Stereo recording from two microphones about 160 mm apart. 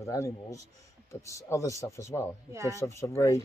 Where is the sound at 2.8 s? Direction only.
20° left (ahead or behind).